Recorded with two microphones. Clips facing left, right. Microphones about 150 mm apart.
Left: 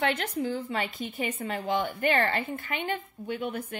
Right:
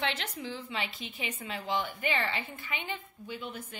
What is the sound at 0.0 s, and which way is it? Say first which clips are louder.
A woman's voice: left 7 dB; 50° left (ahead or behind).